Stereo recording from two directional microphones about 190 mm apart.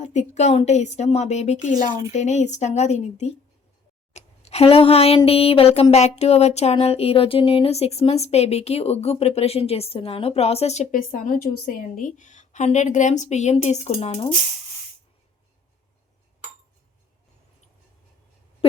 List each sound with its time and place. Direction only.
0.0 s speech: 35° left (ahead or behind)